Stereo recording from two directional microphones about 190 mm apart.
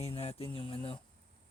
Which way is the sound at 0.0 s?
30° left (ahead or behind).